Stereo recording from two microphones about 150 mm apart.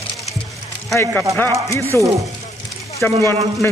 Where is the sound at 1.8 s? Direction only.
20° right (ahead or behind).